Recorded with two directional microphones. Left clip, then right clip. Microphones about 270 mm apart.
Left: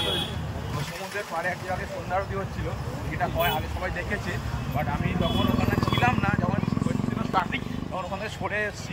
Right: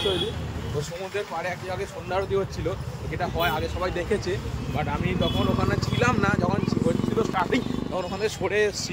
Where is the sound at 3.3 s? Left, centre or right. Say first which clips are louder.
Right 3 dB; centre.